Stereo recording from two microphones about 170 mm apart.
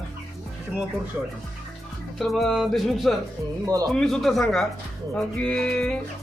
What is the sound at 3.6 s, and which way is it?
Speech, 20° right (ahead or behind).